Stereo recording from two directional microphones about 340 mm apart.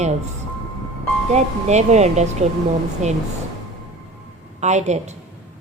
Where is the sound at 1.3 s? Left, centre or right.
Centre.